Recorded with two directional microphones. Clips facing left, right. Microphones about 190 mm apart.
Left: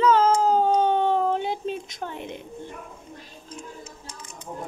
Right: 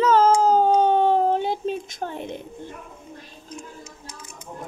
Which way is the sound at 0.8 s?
40° right (ahead or behind).